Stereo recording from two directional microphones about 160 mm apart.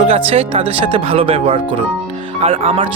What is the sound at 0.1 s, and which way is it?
Speech, 40° right (ahead or behind).